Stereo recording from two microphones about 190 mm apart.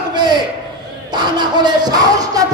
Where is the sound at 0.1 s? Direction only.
20° right (ahead or behind).